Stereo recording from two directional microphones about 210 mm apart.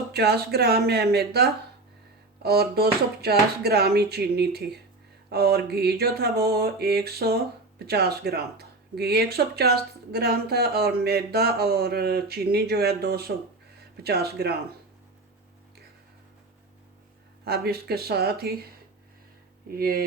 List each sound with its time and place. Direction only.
0.1 s speech: 50° right (ahead or behind)
17.4 s speech: 50° right (ahead or behind)
19.6 s speech: 45° right (ahead or behind)